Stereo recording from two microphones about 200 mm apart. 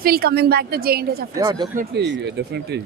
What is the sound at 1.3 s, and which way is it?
Speech, 20° right (ahead or behind).